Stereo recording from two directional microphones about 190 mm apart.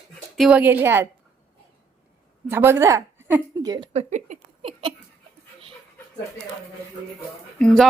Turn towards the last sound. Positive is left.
turn(degrees=5)  # may be behind; listen again after turning